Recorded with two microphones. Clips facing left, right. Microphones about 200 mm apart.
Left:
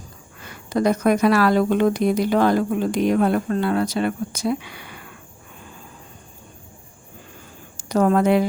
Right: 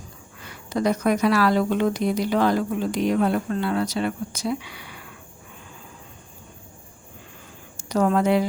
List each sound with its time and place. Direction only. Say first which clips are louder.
0.4 s speech: left 3 dB; 50° left (ahead or behind)
7.9 s speech: left 3 dB; 50° left (ahead or behind)